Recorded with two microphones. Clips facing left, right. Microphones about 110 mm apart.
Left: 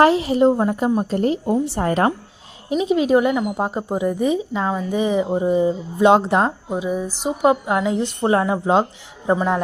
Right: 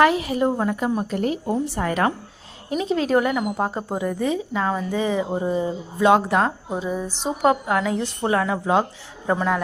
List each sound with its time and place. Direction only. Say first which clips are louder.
0.0 s a woman's voice: left 4 dB; 30° left (ahead or behind)
2.6 s a woman's voice: left 4 dB; 15° left (ahead or behind)
6.7 s a woman's voice: left 3 dB; 10° left (ahead or behind)